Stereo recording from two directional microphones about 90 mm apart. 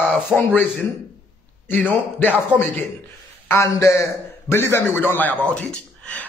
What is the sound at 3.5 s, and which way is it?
A man's voice, 35° left (ahead or behind).